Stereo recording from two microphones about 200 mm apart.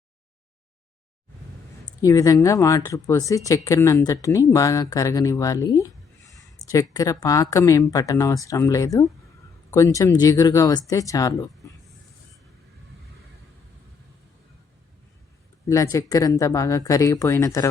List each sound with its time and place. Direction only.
1.8 s speech: 15° left (ahead or behind)
15.7 s speech: 15° left (ahead or behind)